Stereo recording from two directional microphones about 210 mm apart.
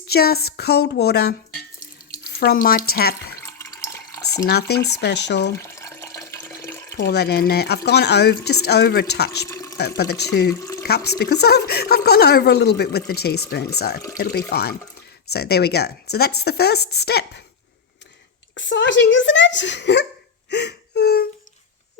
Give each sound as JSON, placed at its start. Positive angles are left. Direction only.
{"t": 0.1, "sound": "speech", "side_deg": 45}
{"t": 2.0, "sound": "drip", "side_deg": 45}
{"t": 2.9, "sound": "speech", "side_deg": 50}
{"t": 3.4, "sound": "water", "side_deg": 15}
{"t": 4.4, "sound": "speech", "side_deg": 50}
{"t": 5.6, "sound": "water", "side_deg": 15}
{"t": 6.9, "sound": "speech", "side_deg": 50}
{"t": 9.5, "sound": "water", "side_deg": 15}
{"t": 10.0, "sound": "speech", "side_deg": 50}
{"t": 10.6, "sound": "water", "side_deg": 15}
{"t": 10.8, "sound": "speech", "side_deg": 50}
{"t": 18.5, "sound": "speech", "side_deg": 60}
{"t": 20.5, "sound": "whimper", "side_deg": 55}